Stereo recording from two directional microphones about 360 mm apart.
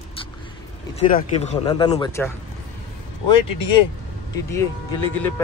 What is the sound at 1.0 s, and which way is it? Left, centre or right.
Speech, centre.